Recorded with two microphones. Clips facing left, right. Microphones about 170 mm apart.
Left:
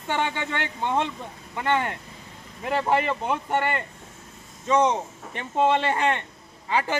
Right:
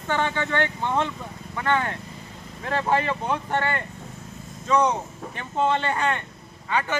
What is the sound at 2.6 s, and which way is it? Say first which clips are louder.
Speech: even; 5° left (ahead or behind).